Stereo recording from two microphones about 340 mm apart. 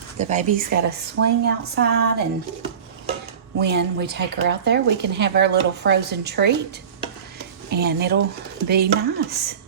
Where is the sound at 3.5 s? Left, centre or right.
Right.